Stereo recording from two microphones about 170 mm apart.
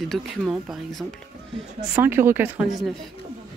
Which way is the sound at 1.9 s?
15° right (ahead or behind).